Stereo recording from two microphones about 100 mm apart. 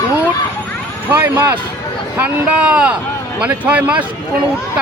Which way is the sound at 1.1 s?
20° right (ahead or behind).